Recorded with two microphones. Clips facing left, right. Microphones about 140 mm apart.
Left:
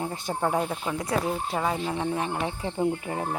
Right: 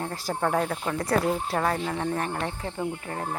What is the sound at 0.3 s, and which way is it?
Speech, 10° left (ahead or behind).